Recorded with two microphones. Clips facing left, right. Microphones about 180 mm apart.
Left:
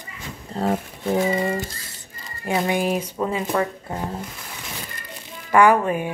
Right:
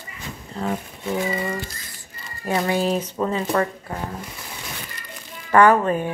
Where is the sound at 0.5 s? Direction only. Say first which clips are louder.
Left 4 dB; 40° left (ahead or behind).